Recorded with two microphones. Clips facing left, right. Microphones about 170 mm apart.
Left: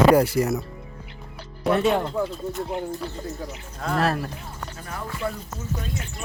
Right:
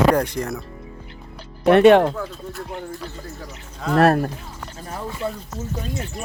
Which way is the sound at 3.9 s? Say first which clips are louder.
Right 8 dB; 55° right (ahead or behind).